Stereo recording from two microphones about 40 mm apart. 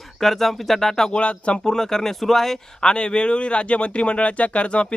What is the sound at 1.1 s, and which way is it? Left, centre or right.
Speech, left.